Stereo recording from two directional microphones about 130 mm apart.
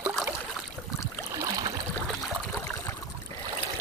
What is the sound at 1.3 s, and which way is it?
Boat, 30° right (ahead or behind).